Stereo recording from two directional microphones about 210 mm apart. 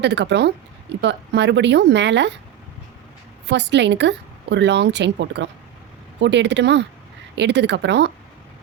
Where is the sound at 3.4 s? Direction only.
55° right (ahead or behind).